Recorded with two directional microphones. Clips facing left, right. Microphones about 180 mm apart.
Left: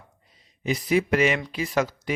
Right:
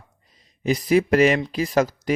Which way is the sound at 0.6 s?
40° right (ahead or behind).